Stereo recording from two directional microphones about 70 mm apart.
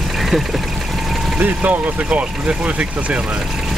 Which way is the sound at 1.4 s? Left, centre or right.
Right.